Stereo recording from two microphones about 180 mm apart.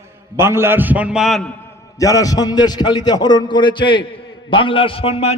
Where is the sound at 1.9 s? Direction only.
20° left (ahead or behind).